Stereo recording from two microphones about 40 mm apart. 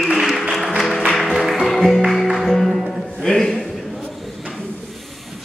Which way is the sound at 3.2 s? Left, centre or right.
Centre.